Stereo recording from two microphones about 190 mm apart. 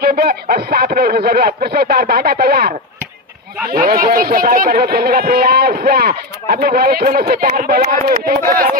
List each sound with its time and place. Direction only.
0.0 s speech: 50° right (ahead or behind)